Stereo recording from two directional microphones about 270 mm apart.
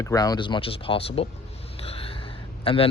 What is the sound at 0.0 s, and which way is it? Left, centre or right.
A man's voice, centre.